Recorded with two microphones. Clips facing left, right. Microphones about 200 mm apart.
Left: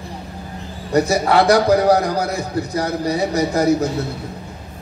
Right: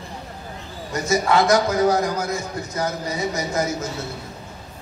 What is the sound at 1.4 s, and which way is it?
A man's voice, 35° left (ahead or behind).